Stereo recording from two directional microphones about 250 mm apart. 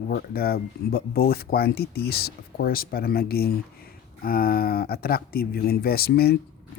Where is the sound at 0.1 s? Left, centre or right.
Left.